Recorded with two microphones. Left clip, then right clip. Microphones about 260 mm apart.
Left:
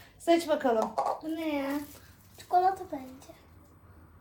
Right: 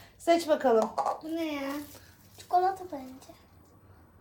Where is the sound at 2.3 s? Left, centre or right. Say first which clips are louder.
Left 1 dB; centre.